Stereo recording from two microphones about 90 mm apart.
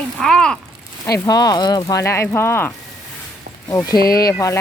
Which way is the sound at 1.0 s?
45° left (ahead or behind).